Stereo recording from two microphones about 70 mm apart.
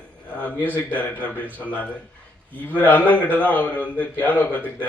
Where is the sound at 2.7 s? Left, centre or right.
Left.